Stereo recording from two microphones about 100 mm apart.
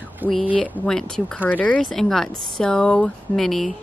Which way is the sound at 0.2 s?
15° right (ahead or behind).